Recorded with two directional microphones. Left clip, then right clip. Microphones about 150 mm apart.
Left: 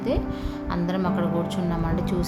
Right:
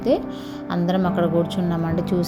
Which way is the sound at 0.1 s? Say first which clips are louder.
Right 5 dB; 35° right (ahead or behind).